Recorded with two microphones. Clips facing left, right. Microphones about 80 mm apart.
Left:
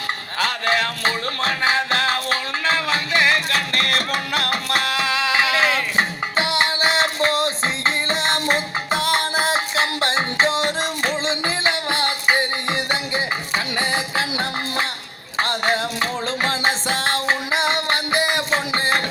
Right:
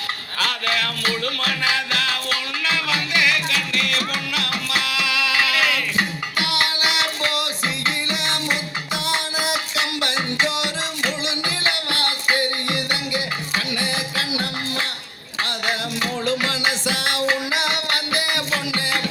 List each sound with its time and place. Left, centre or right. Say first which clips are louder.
0.3 s music: left 3 dB; left